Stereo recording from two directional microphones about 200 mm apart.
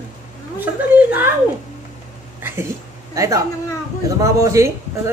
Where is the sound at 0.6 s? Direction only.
10° right (ahead or behind).